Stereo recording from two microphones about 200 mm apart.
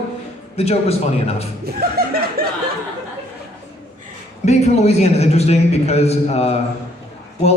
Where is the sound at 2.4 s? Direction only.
50° right (ahead or behind).